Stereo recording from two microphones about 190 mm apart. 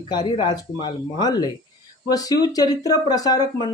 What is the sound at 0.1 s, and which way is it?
Speech, 20° left (ahead or behind).